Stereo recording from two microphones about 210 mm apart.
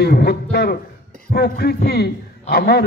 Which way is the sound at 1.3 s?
50° left (ahead or behind).